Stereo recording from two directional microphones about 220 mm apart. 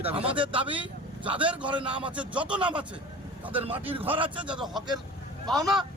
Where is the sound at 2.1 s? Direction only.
5° right (ahead or behind).